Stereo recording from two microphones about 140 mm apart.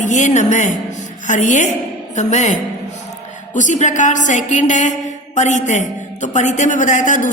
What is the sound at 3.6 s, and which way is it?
A woman's voice, 60° left (ahead or behind).